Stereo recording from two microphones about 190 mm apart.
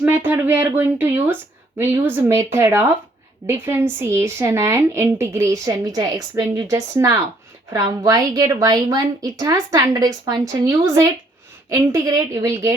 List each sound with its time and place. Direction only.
0.3 s a woman's voice: 10° right (ahead or behind)